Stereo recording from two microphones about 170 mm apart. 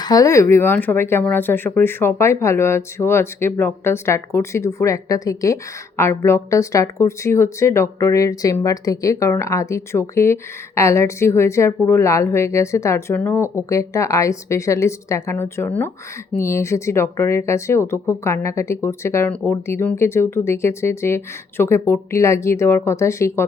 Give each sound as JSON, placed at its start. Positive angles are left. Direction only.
{"t": 0.0, "sound": "speech", "side_deg": 20}